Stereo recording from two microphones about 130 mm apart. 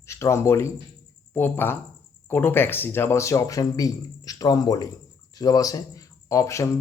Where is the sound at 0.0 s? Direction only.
20° left (ahead or behind).